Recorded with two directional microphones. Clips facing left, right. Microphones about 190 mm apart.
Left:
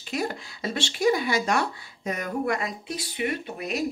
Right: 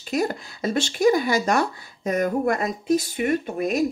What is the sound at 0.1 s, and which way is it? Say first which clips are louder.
Speech: right 5 dB; 45° right (ahead or behind).